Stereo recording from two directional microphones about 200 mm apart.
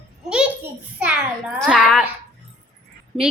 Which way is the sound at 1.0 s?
5° right (ahead or behind).